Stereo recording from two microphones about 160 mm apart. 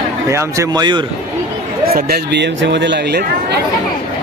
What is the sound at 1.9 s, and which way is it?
Speech, 75° right (ahead or behind).